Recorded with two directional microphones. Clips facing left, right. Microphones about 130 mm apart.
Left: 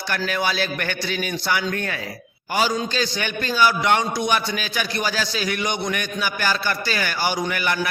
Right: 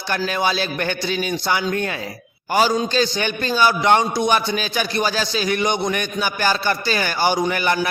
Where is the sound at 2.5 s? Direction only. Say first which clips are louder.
Right 4 dB; 35° right (ahead or behind).